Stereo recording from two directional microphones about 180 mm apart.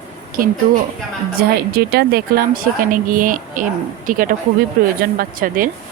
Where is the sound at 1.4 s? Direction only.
60° right (ahead or behind).